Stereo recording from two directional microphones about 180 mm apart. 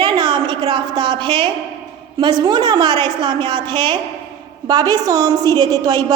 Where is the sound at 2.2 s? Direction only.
25° right (ahead or behind).